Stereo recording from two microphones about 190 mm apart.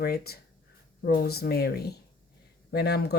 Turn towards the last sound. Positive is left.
turn(degrees=55)  # may be behind; listen again after turning